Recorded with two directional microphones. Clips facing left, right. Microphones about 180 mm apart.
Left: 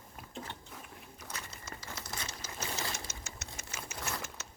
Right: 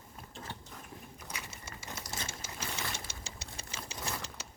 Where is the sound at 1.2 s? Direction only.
10° right (ahead or behind).